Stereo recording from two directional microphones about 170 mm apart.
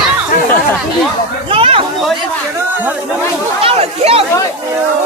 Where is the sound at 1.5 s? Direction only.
30° right (ahead or behind).